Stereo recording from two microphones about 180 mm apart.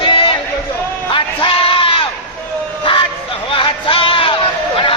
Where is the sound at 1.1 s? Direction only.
30° left (ahead or behind).